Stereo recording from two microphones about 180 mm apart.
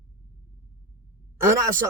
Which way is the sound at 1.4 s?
15° right (ahead or behind).